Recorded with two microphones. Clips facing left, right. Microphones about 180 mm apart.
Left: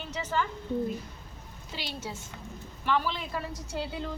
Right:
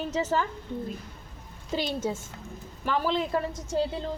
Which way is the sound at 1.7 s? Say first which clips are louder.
Right 10 dB; 45° right (ahead or behind).